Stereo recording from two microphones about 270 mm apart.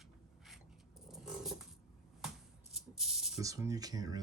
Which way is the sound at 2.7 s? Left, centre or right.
Centre.